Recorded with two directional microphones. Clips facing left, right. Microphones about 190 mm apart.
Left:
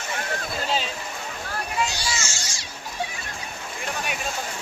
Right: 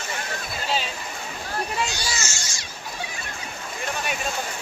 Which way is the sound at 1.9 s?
30° left (ahead or behind).